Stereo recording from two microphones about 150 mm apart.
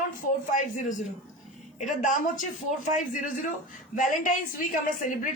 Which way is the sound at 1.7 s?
60° left (ahead or behind).